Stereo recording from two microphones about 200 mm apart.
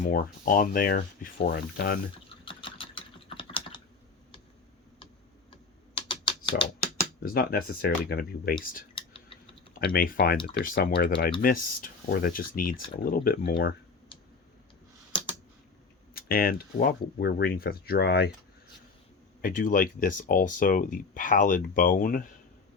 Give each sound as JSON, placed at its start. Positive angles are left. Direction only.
{"t": 0.0, "sound": "speech", "side_deg": 45}
{"t": 2.4, "sound": "typing", "side_deg": 25}
{"t": 6.1, "sound": "typing", "side_deg": 25}
{"t": 6.7, "sound": "speech", "side_deg": 50}
{"t": 9.0, "sound": "typing", "side_deg": 25}
{"t": 9.7, "sound": "speech", "side_deg": 45}
{"t": 16.1, "sound": "speech", "side_deg": 50}
{"t": 19.4, "sound": "speech", "side_deg": 45}